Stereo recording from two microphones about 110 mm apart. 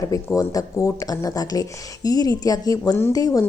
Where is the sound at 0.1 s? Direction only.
30° left (ahead or behind).